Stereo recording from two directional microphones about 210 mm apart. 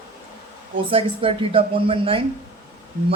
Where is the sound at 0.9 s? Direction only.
25° right (ahead or behind).